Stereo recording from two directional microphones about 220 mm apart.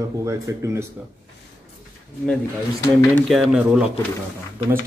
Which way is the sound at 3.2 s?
Centre (ahead or behind).